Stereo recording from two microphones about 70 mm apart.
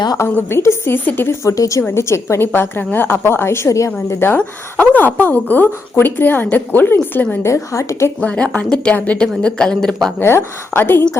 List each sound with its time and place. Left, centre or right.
0.3 s a woman's voice: left
1.5 s a woman's voice: left
1.9 s a woman's voice: left
4.1 s a woman's voice: left
7.4 s a woman's voice: left
8.2 s a woman's voice: centre
10.2 s a woman's voice: left